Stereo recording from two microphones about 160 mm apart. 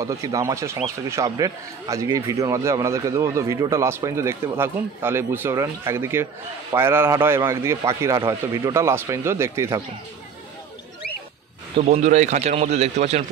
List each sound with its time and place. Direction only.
0.0 s a man's voice: 20° right (ahead or behind)
11.7 s speech: 45° right (ahead or behind)